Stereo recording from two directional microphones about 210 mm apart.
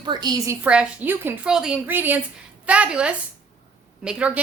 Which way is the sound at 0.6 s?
5° right (ahead or behind).